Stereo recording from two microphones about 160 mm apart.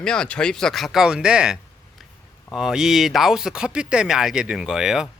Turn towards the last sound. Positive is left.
turn(degrees=-5)  # may be behind; listen again after turning